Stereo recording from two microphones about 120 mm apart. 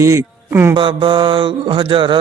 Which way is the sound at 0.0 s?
20° right (ahead or behind).